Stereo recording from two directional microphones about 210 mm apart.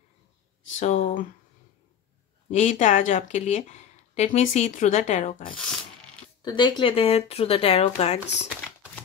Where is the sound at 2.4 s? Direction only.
35° left (ahead or behind).